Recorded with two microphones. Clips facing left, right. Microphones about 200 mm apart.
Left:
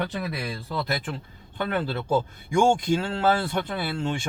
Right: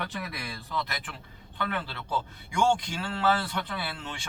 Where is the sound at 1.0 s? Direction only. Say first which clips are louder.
Left 10 dB; 45° left (ahead or behind).